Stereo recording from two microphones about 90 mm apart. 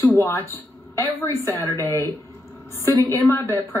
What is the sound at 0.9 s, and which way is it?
A man's voice, 25° left (ahead or behind).